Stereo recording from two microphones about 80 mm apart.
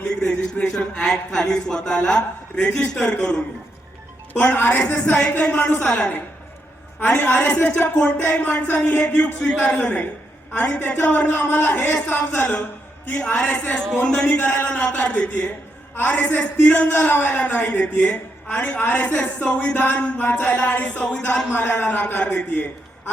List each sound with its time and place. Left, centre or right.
0.0 s a woman's voice: centre
4.4 s a woman's voice: centre
13.1 s a woman's voice: centre
13.7 s a woman's voice: centre
14.3 s a woman's voice: left